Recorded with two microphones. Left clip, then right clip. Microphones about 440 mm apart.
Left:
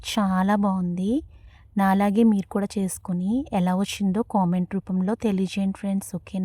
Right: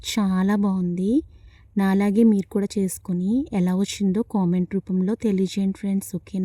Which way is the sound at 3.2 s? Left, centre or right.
Left.